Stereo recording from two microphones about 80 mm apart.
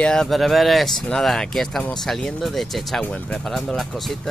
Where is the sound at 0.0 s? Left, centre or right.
Centre.